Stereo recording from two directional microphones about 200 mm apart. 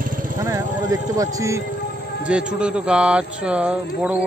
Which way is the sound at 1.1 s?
15° right (ahead or behind).